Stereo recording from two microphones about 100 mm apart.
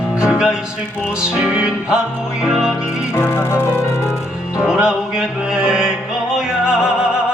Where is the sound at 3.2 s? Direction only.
20° left (ahead or behind).